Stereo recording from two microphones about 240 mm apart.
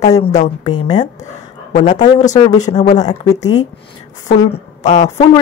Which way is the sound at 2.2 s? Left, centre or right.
Left.